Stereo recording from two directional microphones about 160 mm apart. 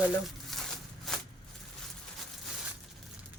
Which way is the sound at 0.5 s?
Centre (ahead or behind).